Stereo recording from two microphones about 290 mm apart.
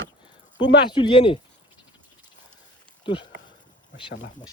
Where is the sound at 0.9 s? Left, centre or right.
Centre.